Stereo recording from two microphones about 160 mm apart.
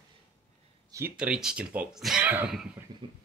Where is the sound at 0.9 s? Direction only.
15° right (ahead or behind).